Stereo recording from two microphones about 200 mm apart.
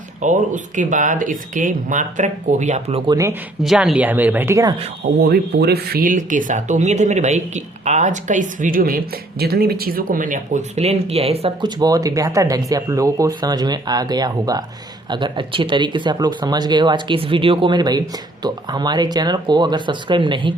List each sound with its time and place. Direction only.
0.2 s speech: 40° right (ahead or behind)
3.6 s speech: centre (ahead or behind)
5.1 s speech: 55° right (ahead or behind); by 20.5 s 25° right (ahead or behind)